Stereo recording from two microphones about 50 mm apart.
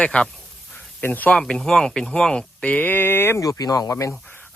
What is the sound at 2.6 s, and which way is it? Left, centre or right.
Speech, left.